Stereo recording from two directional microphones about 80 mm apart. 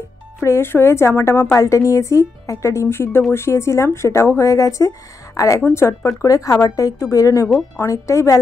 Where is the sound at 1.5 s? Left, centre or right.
Left.